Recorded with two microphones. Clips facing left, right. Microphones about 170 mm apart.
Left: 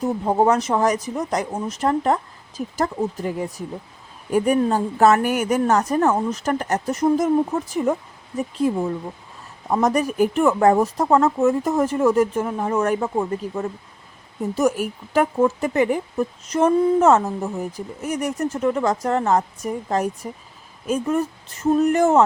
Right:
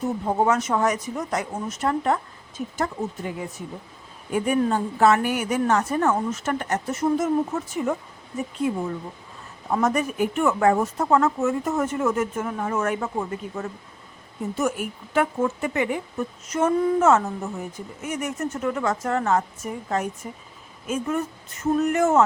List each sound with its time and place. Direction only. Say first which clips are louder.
0.3 s speech: left 4 dB; 35° left (ahead or behind)
9.7 s speech: left 4 dB; 35° left (ahead or behind)